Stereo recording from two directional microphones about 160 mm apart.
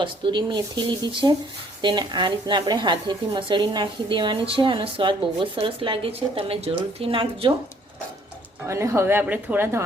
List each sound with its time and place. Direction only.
0.0 s a woman's voice: 30° right (ahead or behind)
8.6 s a woman's voice: 20° right (ahead or behind)